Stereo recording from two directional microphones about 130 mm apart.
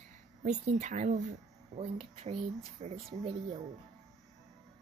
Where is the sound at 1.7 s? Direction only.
50° right (ahead or behind).